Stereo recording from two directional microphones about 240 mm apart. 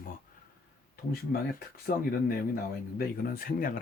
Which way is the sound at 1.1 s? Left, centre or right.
Left.